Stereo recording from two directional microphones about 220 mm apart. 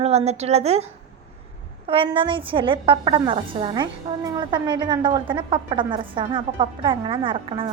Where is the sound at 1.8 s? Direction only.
25° right (ahead or behind).